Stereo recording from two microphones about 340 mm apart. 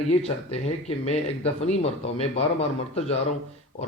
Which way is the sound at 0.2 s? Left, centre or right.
Centre.